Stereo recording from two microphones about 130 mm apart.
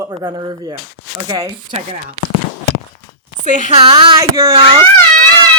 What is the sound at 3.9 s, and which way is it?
Speech, 35° right (ahead or behind).